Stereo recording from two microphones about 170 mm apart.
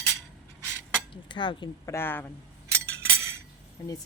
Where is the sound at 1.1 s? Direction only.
30° left (ahead or behind).